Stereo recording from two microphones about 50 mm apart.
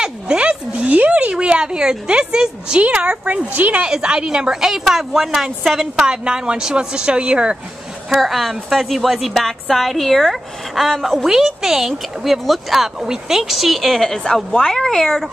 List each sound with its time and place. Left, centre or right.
0.0 s a sound: right
2.8 s speech: right
3.8 s a woman's voice: centre
5.9 s speech: centre
8.2 s a woman's voice: centre
11.2 s a woman's voice: centre
13.9 s a woman's voice: centre